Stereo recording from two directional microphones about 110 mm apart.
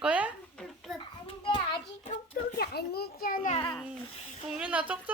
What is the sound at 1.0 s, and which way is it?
Children playing, 50° left (ahead or behind).